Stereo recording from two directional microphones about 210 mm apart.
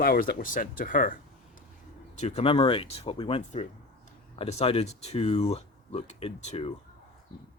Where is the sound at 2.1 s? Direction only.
30° left (ahead or behind).